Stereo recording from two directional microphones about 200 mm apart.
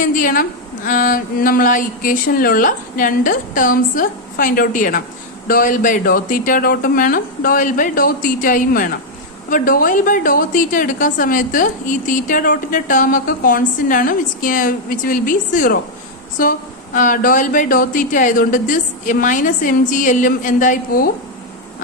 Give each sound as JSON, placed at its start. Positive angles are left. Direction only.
{"t": 0.0, "sound": "a woman's voice", "side_deg": 40}